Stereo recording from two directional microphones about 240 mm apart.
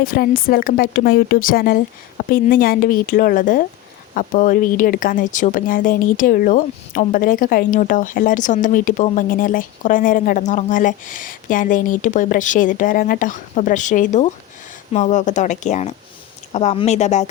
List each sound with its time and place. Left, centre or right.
0.0 s speech: left